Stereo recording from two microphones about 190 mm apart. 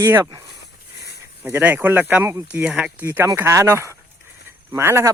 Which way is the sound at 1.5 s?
10° right (ahead or behind).